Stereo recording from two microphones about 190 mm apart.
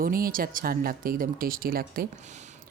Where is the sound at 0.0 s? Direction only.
50° right (ahead or behind).